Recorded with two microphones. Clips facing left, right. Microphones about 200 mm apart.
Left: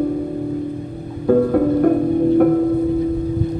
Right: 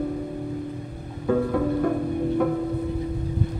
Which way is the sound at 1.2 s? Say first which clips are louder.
Left 8 dB; 45° left (ahead or behind).